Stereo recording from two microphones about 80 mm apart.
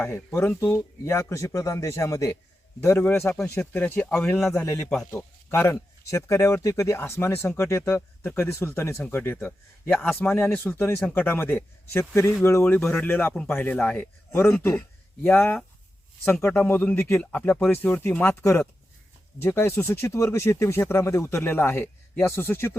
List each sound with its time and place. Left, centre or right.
0.3 s speech: left
2.8 s speech: left
3.7 s a man's voice: left
4.4 s a man's voice: centre
5.1 s a man's voice: left
12.9 s a man's voice: left
16.6 s a man's voice: left